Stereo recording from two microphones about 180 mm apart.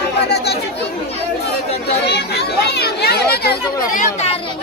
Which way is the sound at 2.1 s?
65° left (ahead or behind).